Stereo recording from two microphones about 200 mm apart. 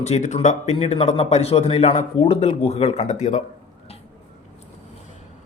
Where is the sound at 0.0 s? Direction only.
35° left (ahead or behind).